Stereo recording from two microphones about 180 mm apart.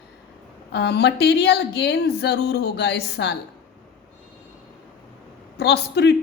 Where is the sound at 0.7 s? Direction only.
65° left (ahead or behind).